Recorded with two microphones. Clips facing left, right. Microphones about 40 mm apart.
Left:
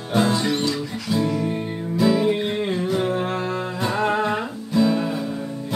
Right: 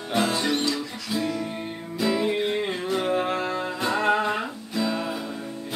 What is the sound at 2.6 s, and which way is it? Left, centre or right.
Music, centre.